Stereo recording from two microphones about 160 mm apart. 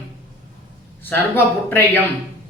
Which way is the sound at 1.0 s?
15° left (ahead or behind).